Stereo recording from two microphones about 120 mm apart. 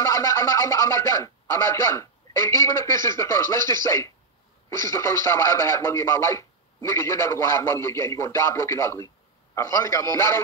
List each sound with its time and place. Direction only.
0.0 s speech: 25° left (ahead or behind)